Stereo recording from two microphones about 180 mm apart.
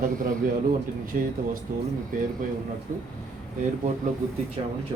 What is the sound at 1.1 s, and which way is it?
Speech, 50° right (ahead or behind).